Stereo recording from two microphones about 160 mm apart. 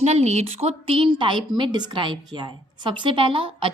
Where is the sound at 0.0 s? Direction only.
45° right (ahead or behind).